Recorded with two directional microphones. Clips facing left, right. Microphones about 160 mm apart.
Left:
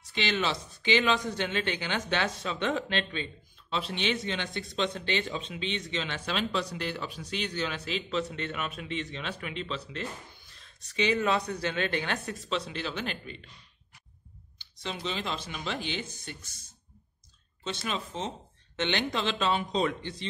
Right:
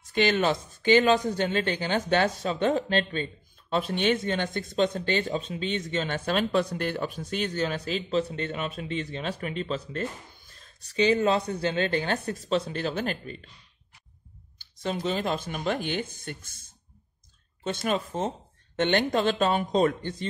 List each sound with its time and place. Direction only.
0.0 s speech: 50° right (ahead or behind)
14.6 s speech: 50° right (ahead or behind)